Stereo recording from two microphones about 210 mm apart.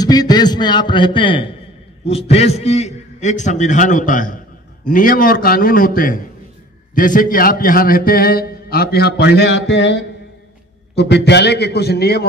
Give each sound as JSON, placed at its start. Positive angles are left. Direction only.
{"t": 0.0, "sound": "a man's voice", "side_deg": 20}